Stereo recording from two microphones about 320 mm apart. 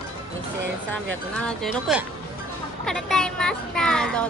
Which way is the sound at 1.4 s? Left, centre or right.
Centre.